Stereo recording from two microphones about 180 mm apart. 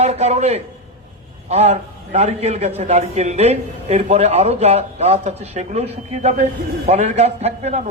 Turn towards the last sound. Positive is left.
turn(degrees=-40)  # may be behind; listen again after turning